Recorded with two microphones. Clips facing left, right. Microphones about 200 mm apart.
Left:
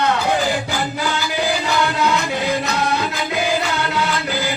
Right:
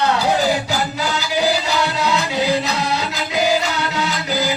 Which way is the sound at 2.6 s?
55° left (ahead or behind).